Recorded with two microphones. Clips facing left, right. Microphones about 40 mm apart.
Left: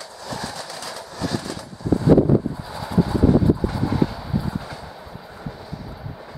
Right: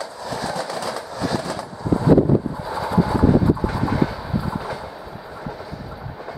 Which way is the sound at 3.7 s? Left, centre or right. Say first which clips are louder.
Right 1 dB; right.